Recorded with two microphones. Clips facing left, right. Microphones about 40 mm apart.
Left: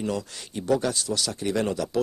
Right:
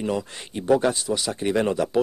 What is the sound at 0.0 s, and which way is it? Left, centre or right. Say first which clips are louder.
Speech: right 3 dB; right.